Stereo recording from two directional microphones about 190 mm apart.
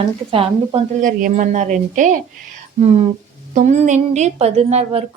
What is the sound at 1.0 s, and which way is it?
A woman's voice, 45° right (ahead or behind).